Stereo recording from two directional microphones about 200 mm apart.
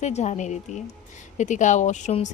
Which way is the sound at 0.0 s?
35° left (ahead or behind).